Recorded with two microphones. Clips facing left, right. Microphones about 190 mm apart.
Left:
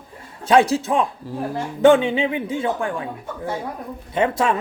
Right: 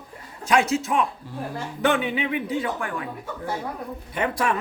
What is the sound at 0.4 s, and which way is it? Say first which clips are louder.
A man's voice: left 5 dB; 30° left (ahead or behind).